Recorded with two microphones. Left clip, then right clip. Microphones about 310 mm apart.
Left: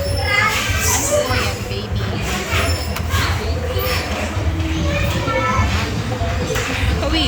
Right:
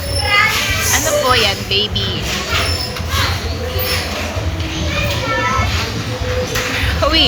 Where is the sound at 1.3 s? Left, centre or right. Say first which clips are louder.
Right 8 dB; centre.